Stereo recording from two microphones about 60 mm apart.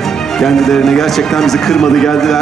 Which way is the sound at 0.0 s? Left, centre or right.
Centre.